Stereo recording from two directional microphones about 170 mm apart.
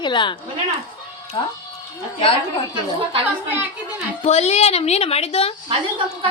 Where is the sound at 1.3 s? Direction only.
30° left (ahead or behind).